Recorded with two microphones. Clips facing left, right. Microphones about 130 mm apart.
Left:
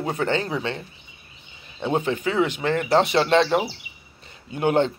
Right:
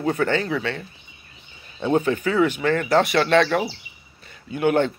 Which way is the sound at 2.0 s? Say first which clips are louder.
Right 2 dB; 25° left (ahead or behind).